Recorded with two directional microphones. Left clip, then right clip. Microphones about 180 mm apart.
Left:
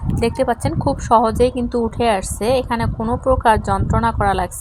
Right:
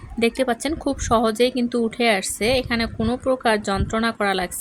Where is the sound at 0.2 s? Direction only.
15° right (ahead or behind).